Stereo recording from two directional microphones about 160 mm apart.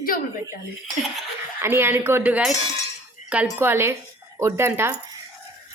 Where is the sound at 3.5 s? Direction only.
15° right (ahead or behind).